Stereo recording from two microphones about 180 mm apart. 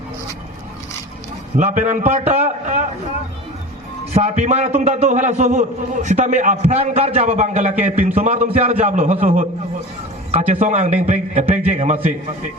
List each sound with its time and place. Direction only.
1.5 s a man's voice: 45° right (ahead or behind)
4.1 s a man's voice: 40° right (ahead or behind)